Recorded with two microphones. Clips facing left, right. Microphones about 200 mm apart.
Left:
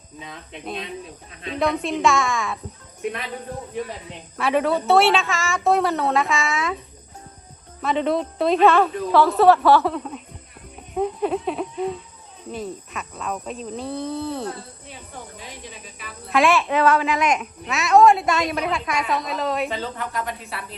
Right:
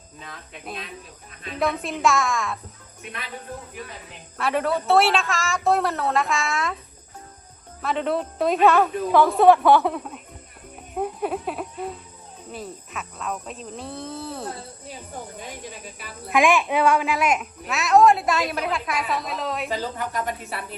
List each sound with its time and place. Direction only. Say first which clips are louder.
0.6 s speech: left 6 dB; centre (ahead or behind)
4.4 s speech: left 3 dB; centre (ahead or behind)
7.8 s speech: left 3 dB; centre (ahead or behind); by 9.8 s 15° right (ahead or behind)
9.8 s speech: left 1 dB; centre (ahead or behind)
16.3 s speech: left 1 dB; 15° right (ahead or behind)